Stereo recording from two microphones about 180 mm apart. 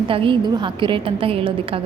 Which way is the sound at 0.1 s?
30° right (ahead or behind).